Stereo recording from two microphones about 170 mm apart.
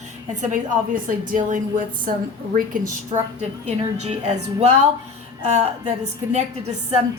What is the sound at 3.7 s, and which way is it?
A woman's voice, 40° right (ahead or behind).